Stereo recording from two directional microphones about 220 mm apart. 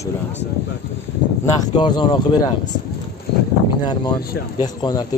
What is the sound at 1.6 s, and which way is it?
Speech, 20° left (ahead or behind).